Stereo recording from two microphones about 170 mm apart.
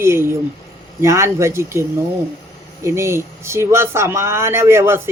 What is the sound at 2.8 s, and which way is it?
A man's voice, 15° right (ahead or behind).